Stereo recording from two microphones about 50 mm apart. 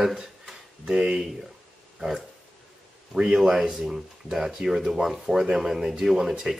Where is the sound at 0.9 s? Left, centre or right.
Centre.